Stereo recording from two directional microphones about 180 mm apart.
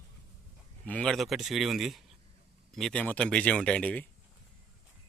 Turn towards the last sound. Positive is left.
turn(degrees=5)  # may be behind; listen again after turning